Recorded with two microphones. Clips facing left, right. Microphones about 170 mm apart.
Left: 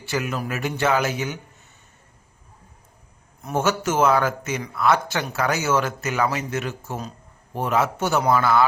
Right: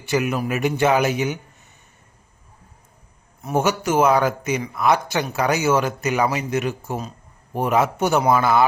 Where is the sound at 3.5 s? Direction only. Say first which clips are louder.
Right 2 dB; 15° right (ahead or behind).